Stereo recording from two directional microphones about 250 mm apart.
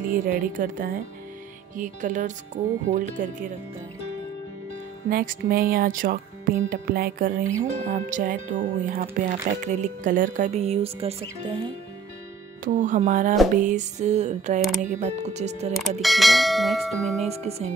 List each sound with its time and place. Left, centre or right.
0.1 s speech: right
5.1 s speech: right
12.6 s speech: right
16.0 s church bell: centre
17.2 s speech: right